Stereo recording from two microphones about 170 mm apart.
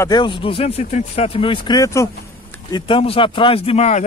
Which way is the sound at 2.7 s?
30° left (ahead or behind).